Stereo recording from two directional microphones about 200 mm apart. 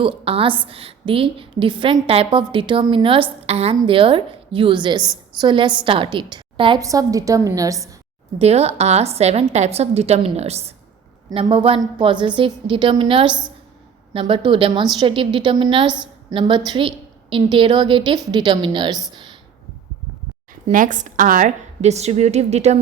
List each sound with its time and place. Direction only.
0.0 s a woman's voice: 25° right (ahead or behind)
8.4 s a woman's voice: 30° right (ahead or behind)
19.1 s a sound: 25° right (ahead or behind)
20.7 s a woman's voice: 40° right (ahead or behind)